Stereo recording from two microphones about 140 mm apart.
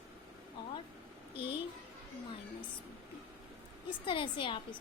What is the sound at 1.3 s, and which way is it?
Speech, 40° left (ahead or behind).